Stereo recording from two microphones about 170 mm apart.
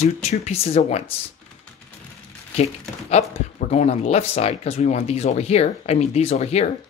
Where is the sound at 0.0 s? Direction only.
40° left (ahead or behind).